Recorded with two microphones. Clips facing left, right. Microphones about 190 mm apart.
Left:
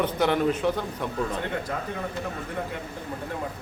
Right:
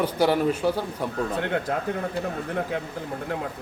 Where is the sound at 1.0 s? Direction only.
35° right (ahead or behind).